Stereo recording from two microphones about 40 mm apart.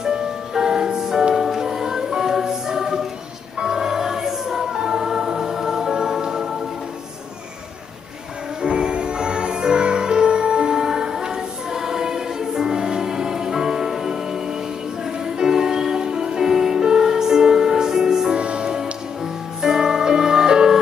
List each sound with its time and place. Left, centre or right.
0.0 s music: centre
3.5 s choir: centre
8.6 s music: right
18.4 s music: right
19.6 s music: centre